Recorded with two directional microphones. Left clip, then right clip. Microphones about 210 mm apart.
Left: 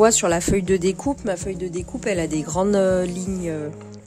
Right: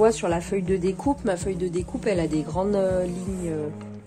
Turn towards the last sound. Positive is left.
turn(degrees=50)  # may be behind; listen again after turning